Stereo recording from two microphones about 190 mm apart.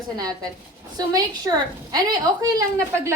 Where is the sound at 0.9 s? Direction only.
20° right (ahead or behind).